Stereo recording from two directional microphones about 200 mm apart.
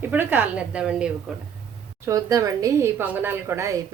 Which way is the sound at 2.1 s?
15° right (ahead or behind).